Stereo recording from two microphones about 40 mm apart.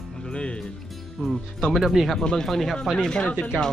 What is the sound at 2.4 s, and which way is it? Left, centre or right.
Speech, centre.